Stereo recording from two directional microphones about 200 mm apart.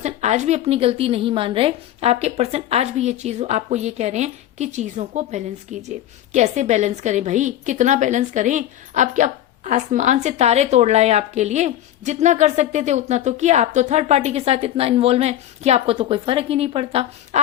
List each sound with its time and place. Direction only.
0.0 s a woman's voice: 35° right (ahead or behind)